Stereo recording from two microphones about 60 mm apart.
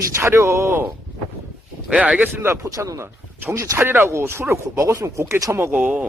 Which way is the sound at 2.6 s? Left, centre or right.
Right.